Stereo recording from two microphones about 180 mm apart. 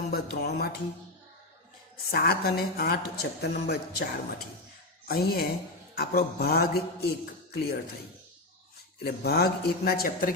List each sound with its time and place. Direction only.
0.1 s a woman's voice: 60° left (ahead or behind)
2.0 s a woman's voice: 60° left (ahead or behind)
9.0 s a woman's voice: 60° left (ahead or behind)